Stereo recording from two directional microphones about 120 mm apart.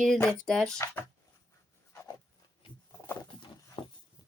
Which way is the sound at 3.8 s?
45° left (ahead or behind).